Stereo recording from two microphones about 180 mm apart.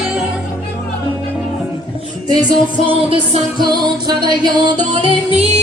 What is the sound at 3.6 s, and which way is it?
Music, 25° right (ahead or behind).